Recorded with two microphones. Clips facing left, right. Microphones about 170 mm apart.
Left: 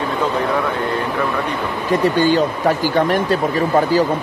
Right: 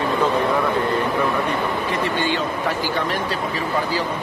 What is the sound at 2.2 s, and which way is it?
Speech, 40° left (ahead or behind).